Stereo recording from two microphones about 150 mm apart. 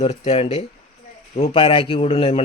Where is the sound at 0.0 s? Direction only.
45° left (ahead or behind).